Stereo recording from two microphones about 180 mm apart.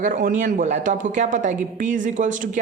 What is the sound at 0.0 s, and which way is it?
Speech, 45° right (ahead or behind).